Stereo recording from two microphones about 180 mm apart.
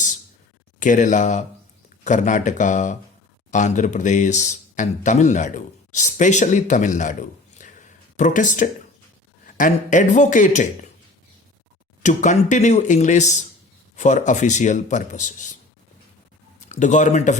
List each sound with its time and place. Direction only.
0.8 s speech: 45° left (ahead or behind)
12.0 s a man's voice: 40° left (ahead or behind)
16.6 s speech: 40° left (ahead or behind)